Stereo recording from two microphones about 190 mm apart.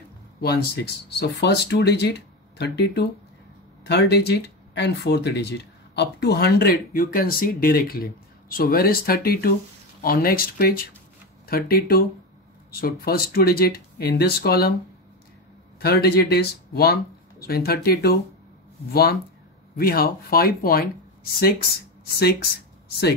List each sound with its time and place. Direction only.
0.4 s speech: 55° left (ahead or behind)
15.8 s speech: 55° left (ahead or behind)
19.8 s speech: 50° left (ahead or behind)